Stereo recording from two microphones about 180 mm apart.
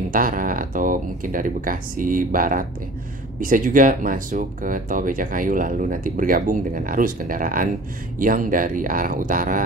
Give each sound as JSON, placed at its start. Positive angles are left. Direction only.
{"t": 0.1, "sound": "speech", "side_deg": -50}